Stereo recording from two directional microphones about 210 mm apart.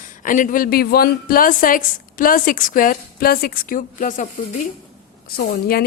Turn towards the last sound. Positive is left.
turn(degrees=50)  # may be behind; listen again after turning